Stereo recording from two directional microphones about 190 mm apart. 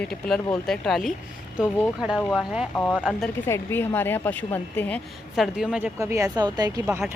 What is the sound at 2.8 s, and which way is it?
A woman's voice, 5° left (ahead or behind).